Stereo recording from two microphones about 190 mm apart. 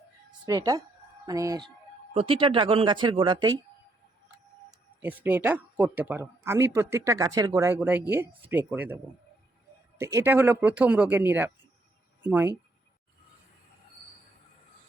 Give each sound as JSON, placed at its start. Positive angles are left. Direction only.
{"t": 0.4, "sound": "speech", "side_deg": -20}
{"t": 2.1, "sound": "speech", "side_deg": -30}
{"t": 4.9, "sound": "speech", "side_deg": -10}
{"t": 10.0, "sound": "speech", "side_deg": -15}